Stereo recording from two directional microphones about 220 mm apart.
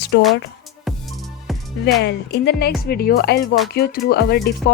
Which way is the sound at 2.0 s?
50° left (ahead or behind).